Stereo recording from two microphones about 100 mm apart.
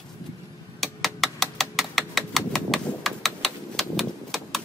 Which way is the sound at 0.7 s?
Centre (ahead or behind).